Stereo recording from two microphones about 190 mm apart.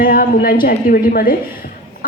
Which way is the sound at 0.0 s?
50° left (ahead or behind).